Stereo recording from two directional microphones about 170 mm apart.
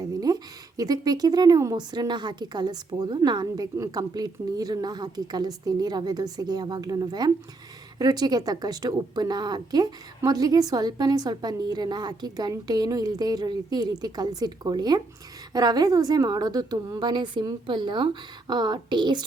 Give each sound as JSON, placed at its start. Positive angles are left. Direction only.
{"t": 0.0, "sound": "speech", "side_deg": -20}